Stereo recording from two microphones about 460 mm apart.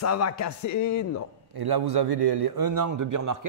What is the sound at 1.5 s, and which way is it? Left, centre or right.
A man's voice, right.